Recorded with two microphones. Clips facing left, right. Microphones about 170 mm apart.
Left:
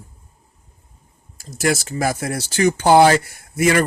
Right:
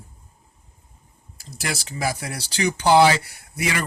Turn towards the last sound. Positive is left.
turn(degrees=50)  # may be behind; listen again after turning